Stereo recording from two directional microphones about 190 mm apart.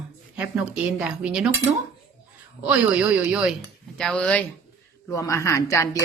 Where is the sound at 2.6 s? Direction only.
5° right (ahead or behind).